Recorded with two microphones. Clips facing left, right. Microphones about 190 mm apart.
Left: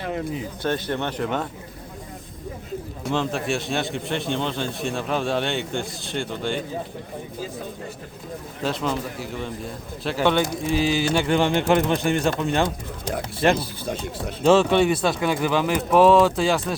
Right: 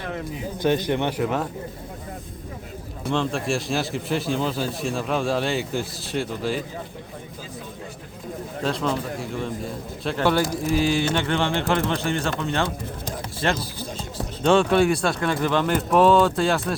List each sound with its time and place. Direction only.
0.6 s a man's voice: 15° right (ahead or behind)
3.0 s a man's voice: centre (ahead or behind)
8.6 s a man's voice: centre (ahead or behind)
11.1 s speech: 10° left (ahead or behind)
13.6 s speech: 60° left (ahead or behind)
14.4 s a man's voice: 5° left (ahead or behind)